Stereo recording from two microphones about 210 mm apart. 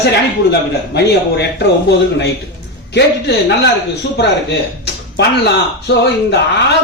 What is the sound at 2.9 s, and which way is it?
Speech, 50° left (ahead or behind).